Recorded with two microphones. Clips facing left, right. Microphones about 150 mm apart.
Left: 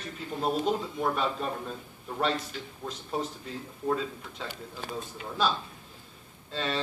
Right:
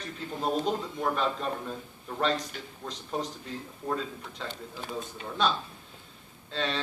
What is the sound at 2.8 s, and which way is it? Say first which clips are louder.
A man's voice: left 1 dB; 5° left (ahead or behind).